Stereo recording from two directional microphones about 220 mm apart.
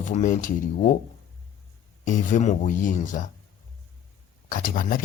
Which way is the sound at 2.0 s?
35° left (ahead or behind).